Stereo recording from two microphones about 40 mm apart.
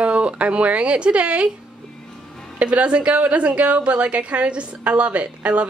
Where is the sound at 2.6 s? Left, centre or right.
Right.